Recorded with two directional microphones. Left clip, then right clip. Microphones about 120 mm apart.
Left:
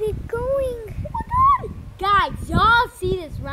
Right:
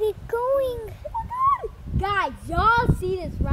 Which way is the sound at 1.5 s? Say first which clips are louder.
Left 5 dB; 20° left (ahead or behind).